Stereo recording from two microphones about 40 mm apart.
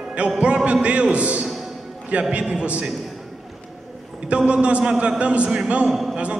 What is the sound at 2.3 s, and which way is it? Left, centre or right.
Speech, right.